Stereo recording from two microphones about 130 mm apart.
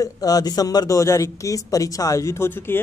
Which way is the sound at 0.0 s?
30° left (ahead or behind).